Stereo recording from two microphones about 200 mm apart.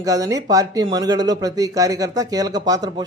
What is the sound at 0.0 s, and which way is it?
Speech, 15° right (ahead or behind).